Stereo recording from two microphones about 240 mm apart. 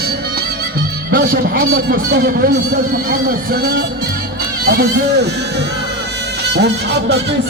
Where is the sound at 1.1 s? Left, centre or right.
Right.